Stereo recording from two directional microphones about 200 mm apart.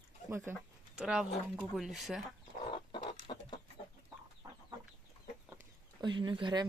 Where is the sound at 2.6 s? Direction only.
25° left (ahead or behind).